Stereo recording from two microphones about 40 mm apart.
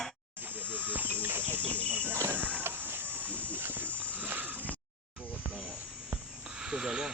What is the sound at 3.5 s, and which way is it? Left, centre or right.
Horse, right.